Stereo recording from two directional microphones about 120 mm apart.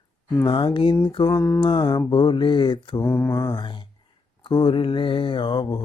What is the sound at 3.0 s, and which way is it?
Mantra, 20° left (ahead or behind).